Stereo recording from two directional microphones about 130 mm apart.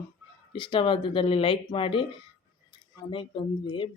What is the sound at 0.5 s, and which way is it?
Speech, 40° left (ahead or behind).